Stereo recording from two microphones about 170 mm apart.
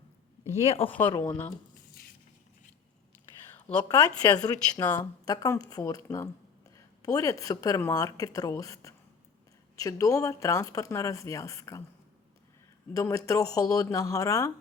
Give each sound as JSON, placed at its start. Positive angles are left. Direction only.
{"t": 0.6, "sound": "speech", "side_deg": 35}
{"t": 0.9, "sound": "speech", "side_deg": 10}
{"t": 4.2, "sound": "speech", "side_deg": 25}
{"t": 12.9, "sound": "speech", "side_deg": 20}